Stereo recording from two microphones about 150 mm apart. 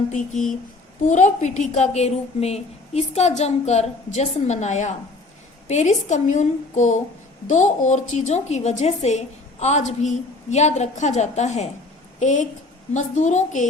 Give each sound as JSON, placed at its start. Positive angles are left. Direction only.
{"t": 1.0, "sound": "a woman's voice", "side_deg": 55}